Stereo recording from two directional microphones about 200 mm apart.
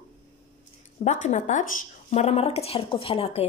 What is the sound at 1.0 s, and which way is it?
A woman's voice, 35° left (ahead or behind).